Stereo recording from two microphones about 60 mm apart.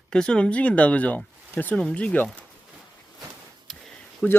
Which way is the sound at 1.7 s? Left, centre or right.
Centre.